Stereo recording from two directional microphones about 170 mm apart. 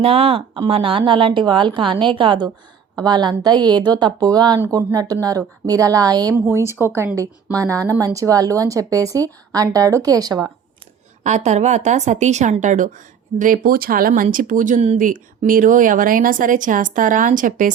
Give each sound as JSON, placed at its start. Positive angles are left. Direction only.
{"t": 0.0, "sound": "a woman's voice", "side_deg": -35}
{"t": 11.2, "sound": "speech", "side_deg": -45}